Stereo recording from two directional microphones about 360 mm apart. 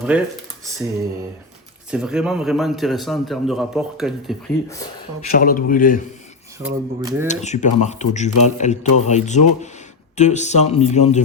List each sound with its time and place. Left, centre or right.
0.1 s a man's voice: centre
1.9 s a man's voice: centre
5.3 s speech: left
6.6 s speech: centre
7.3 s speech: centre